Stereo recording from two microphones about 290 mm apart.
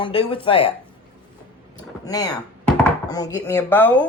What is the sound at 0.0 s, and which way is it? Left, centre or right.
Speech, centre.